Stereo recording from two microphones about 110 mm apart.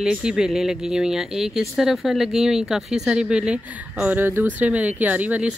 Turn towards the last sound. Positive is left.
turn(degrees=-15)  # may be behind; listen again after turning